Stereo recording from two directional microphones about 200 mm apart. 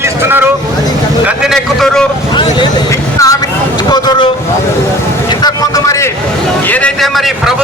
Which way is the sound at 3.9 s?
20° left (ahead or behind).